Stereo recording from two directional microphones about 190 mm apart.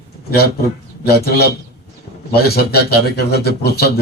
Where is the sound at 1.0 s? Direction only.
55° left (ahead or behind).